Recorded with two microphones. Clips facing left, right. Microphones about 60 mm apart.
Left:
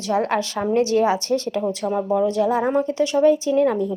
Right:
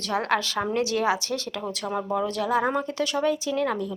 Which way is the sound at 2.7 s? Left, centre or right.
Right.